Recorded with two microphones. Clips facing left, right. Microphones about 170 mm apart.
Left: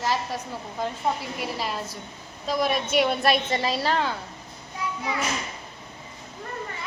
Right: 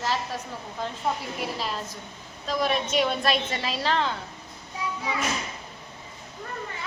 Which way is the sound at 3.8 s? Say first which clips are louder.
Left 1 dB; 10° left (ahead or behind).